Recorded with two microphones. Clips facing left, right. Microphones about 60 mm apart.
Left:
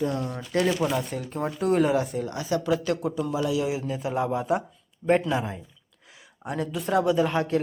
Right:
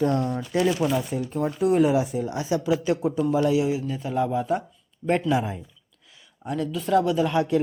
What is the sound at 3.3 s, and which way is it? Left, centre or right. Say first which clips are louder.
Speech: right 6 dB; right.